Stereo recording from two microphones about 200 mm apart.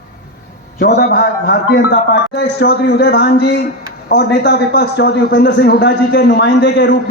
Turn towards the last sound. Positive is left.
turn(degrees=60)  # may be behind; listen again after turning